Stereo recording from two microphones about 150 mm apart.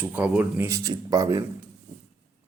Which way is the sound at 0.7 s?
20° right (ahead or behind).